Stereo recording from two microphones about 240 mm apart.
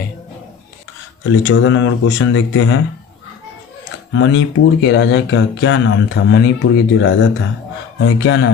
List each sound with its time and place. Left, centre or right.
1.3 s speech: left
4.1 s speech: left